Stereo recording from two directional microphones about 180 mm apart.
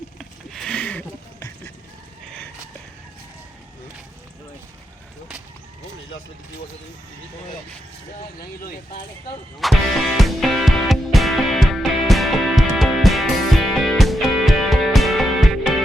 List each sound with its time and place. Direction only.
0.2 s a sound: centre (ahead or behind)
8.4 s speech: 55° left (ahead or behind)
9.6 s music: centre (ahead or behind)